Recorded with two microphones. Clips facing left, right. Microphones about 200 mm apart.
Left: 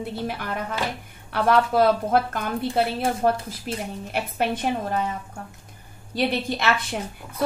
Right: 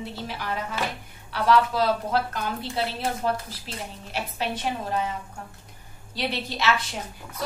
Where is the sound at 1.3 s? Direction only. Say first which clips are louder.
Left 2 dB; 55° left (ahead or behind).